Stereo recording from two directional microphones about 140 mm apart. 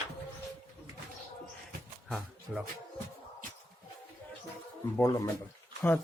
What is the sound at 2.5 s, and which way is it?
Speech, 5° right (ahead or behind).